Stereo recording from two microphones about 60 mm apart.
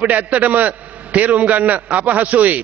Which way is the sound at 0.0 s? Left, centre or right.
Right.